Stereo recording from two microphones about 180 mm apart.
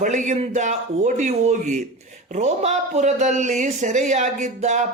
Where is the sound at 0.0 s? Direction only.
45° right (ahead or behind).